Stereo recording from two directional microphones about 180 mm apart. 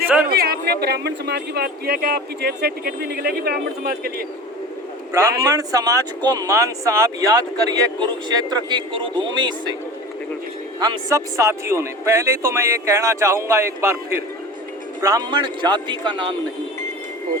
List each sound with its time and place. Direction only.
0.3 s speech: 60° right (ahead or behind)
5.4 s speech: 20° right (ahead or behind)
10.8 s speech: 25° right (ahead or behind)